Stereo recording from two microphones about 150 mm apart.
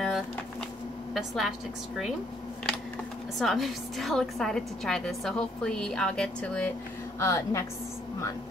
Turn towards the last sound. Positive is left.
turn(degrees=20)  # may be behind; listen again after turning